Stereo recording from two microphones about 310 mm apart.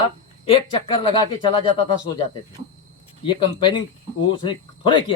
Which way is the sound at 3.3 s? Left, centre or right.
Centre.